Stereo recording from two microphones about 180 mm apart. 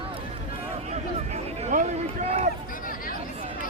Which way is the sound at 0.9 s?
35° right (ahead or behind).